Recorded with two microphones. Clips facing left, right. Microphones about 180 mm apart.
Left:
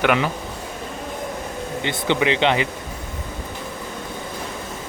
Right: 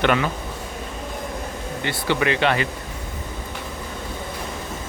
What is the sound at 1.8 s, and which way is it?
Speech, 20° left (ahead or behind).